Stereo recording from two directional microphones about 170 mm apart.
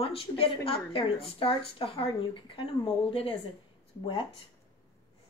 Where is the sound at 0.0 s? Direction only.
35° left (ahead or behind).